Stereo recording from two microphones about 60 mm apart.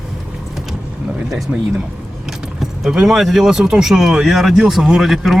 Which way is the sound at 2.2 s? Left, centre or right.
Centre.